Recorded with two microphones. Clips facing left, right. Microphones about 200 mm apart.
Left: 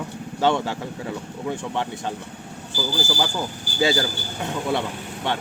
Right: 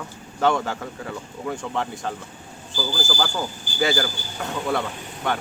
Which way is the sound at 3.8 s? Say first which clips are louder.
Left 1 dB; 25° left (ahead or behind).